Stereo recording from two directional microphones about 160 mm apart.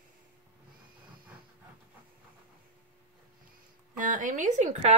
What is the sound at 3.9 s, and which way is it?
Speech, 55° right (ahead or behind).